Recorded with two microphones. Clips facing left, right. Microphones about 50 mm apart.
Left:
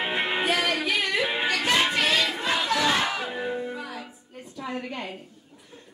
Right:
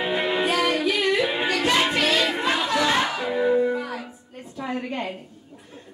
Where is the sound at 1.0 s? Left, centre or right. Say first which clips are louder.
Right 3 dB; centre.